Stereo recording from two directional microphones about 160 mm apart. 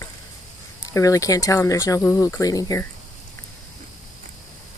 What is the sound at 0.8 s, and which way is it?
Speech, 20° left (ahead or behind).